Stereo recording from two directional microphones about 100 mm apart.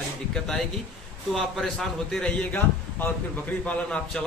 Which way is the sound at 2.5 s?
20° left (ahead or behind).